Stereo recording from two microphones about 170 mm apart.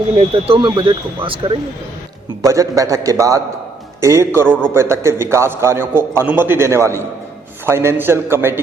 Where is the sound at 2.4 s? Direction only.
20° right (ahead or behind).